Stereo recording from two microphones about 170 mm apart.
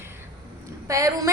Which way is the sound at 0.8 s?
20° right (ahead or behind).